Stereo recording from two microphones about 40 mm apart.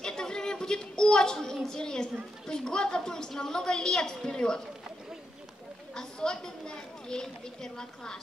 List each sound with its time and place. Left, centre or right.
0.0 s a sound: centre
1.7 s speech: centre
5.9 s speech: centre